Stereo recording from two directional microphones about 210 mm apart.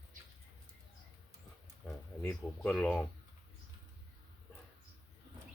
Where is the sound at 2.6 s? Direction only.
5° left (ahead or behind).